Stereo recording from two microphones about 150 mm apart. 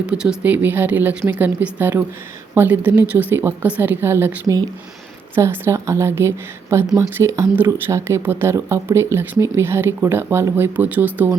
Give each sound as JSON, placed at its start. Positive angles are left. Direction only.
{"t": 0.0, "sound": "speech", "side_deg": -5}